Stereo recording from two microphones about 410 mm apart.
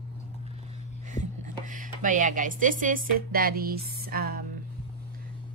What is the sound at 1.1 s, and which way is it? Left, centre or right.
Speech, centre.